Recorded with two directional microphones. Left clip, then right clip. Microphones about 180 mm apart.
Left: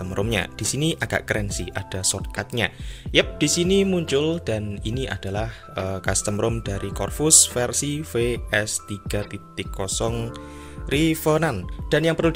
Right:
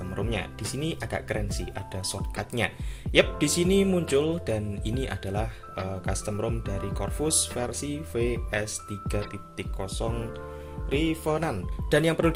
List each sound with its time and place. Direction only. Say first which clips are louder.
0.1 s speech: left 8 dB; 45° left (ahead or behind); by 5.5 s 25° left (ahead or behind)
5.9 s speech: left 10 dB; 40° left (ahead or behind)
11.9 s speech: left 3 dB; 20° left (ahead or behind)